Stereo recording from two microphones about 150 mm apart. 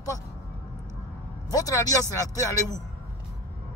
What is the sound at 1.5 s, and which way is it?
Speech, 25° left (ahead or behind).